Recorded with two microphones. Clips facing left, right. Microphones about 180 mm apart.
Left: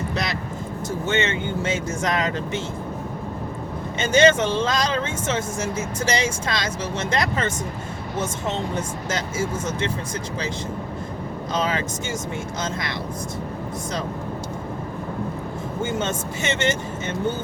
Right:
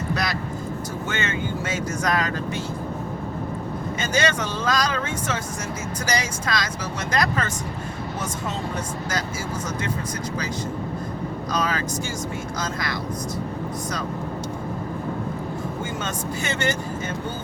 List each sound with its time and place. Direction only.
0.1 s vehicle: 25° left (ahead or behind)
1.0 s speech: 25° left (ahead or behind)
4.0 s speech: 25° left (ahead or behind)
9.0 s speech: 25° left (ahead or behind)
11.5 s speech: 25° left (ahead or behind)
15.8 s speech: 25° left (ahead or behind)